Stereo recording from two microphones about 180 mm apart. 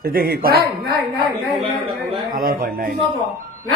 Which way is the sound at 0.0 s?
55° right (ahead or behind).